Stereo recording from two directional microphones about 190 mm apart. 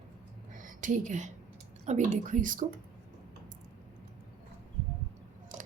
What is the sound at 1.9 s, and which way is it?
Speech, 40° right (ahead or behind).